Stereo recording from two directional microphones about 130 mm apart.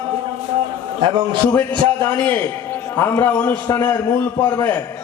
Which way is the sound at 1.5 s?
15° left (ahead or behind).